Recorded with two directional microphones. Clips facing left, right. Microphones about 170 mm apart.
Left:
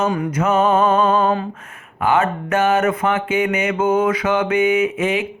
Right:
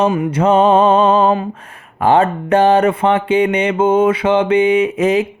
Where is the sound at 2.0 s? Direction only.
35° right (ahead or behind).